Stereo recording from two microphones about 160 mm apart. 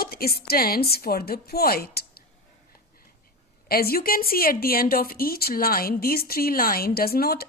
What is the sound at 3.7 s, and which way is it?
Speech, 70° left (ahead or behind).